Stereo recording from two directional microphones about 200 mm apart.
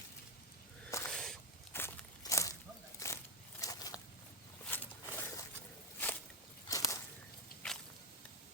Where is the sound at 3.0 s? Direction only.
15° left (ahead or behind).